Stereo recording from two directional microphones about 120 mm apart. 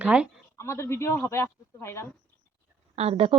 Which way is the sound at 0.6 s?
25° left (ahead or behind).